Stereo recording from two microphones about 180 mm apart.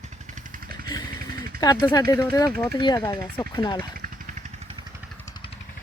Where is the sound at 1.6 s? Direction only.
20° left (ahead or behind).